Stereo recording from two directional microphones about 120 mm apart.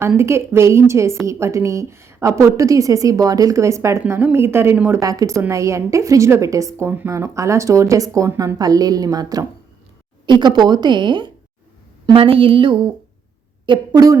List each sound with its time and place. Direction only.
0.2 s a woman's voice: 20° right (ahead or behind); by 12.9 s 45° right (ahead or behind)
13.7 s a woman's voice: 35° right (ahead or behind)